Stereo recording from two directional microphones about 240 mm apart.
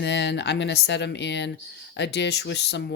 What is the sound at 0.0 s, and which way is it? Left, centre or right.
Speech, left.